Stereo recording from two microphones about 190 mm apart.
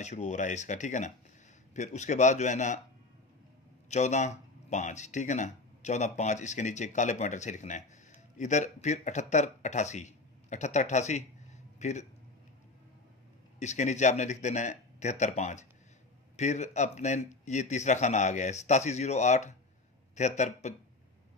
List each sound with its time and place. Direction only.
0.0 s a man's voice: 40° left (ahead or behind)
3.9 s speech: 35° left (ahead or behind)
13.6 s a man's voice: 40° left (ahead or behind)